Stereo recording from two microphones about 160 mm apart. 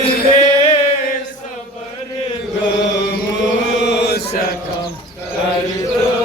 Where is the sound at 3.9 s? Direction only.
90° left.